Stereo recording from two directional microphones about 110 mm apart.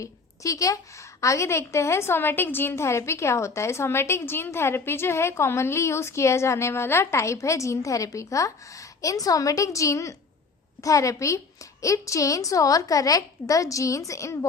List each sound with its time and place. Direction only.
0.0 s a woman's voice: 30° left (ahead or behind)